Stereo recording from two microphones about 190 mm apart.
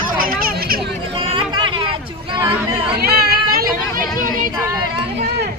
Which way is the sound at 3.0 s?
55° right (ahead or behind).